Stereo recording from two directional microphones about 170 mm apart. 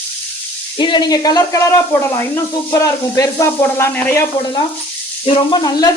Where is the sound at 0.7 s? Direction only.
25° left (ahead or behind).